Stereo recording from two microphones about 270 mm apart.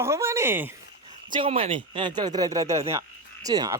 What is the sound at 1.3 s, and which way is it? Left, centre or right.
Speech, centre.